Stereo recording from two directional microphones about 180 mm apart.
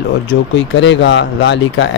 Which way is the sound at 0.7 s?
80° left.